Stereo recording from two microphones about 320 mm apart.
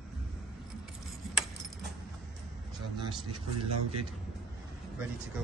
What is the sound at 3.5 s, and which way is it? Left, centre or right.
Speech, right.